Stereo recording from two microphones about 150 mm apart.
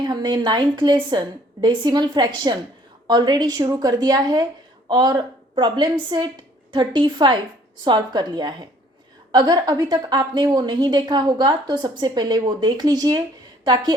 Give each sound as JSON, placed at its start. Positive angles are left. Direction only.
{"t": 0.0, "sound": "a woman's voice", "side_deg": -30}